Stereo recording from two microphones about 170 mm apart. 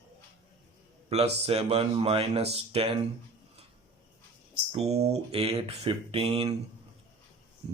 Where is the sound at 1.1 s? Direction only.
35° right (ahead or behind).